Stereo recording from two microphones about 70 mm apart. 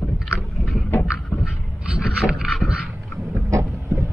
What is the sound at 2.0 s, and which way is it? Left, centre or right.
Boat, centre.